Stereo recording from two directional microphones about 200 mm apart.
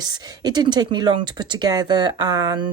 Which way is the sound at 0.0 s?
20° right (ahead or behind).